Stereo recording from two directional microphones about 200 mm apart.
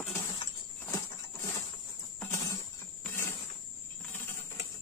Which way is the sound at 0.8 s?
15° left (ahead or behind).